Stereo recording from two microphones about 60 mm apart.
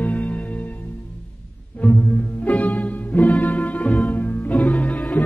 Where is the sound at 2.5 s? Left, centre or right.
Left.